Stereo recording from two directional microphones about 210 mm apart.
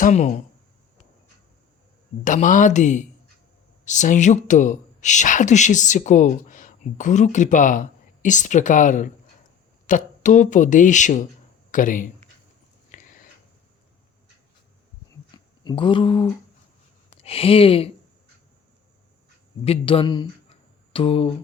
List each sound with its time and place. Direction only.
0.0 s speech: 35° left (ahead or behind)
2.2 s speech: 35° left (ahead or behind)
12.9 s a sound: 40° left (ahead or behind)
15.6 s speech: 25° left (ahead or behind)
19.6 s speech: 25° left (ahead or behind)